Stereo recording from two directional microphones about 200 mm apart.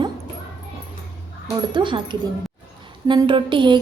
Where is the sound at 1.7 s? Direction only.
25° right (ahead or behind).